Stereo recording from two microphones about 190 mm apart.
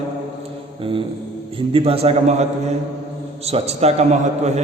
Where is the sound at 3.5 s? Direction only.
35° right (ahead or behind).